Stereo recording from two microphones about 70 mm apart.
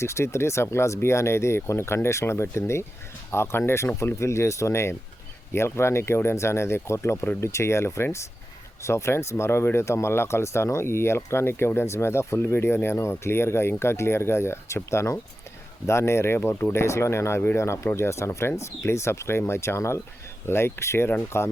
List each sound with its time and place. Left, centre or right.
0.0 s speech: left